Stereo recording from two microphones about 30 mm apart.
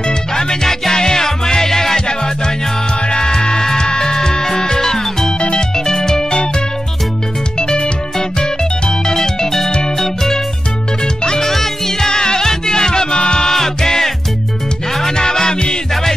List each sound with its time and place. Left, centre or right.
0.3 s music: centre
7.5 s music: left
15.1 s music: left